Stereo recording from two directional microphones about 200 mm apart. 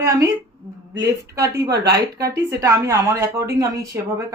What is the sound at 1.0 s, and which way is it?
Speech, 15° right (ahead or behind).